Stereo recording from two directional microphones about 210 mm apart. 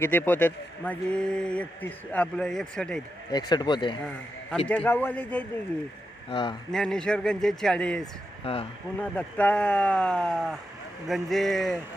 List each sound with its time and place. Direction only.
0.0 s speech: 10° left (ahead or behind)
3.3 s speech: 20° left (ahead or behind)
4.7 s speech: 5° left (ahead or behind)
6.3 s speech: 20° left (ahead or behind)
6.7 s speech: 5° left (ahead or behind)